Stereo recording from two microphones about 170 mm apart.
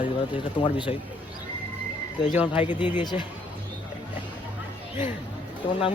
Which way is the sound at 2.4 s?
10° right (ahead or behind).